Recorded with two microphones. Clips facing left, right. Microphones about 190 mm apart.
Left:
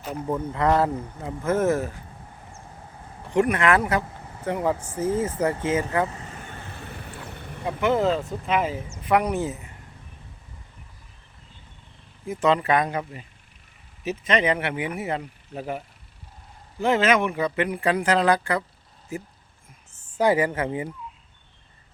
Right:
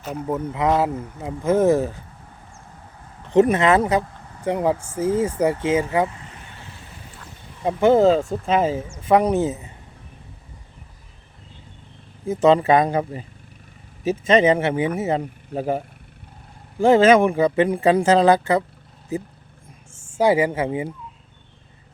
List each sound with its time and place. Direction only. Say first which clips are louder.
0.0 s speech: right 2 dB; 5° right (ahead or behind)
3.3 s speech: right 5 dB; 25° right (ahead or behind)
6.1 s vehicle: left 3 dB; 40° left (ahead or behind)
6.7 s vehicle: left 4 dB; 60° left (ahead or behind)
7.6 s speech: right 7 dB; 30° right (ahead or behind)
12.2 s speech: right 6 dB; 25° right (ahead or behind)
15.2 s speech: right 8 dB; 35° right (ahead or behind)
16.8 s speech: right 7 dB; 30° right (ahead or behind); by 20.7 s 10° right (ahead or behind)
20.7 s speech: right 4 dB; 20° right (ahead or behind)